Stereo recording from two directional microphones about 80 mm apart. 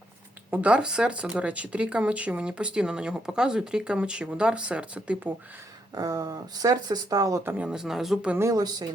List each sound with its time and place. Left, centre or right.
0.5 s speech: centre
5.9 s speech: right
7.6 s speech: centre
8.4 s speech: right
8.6 s speech: right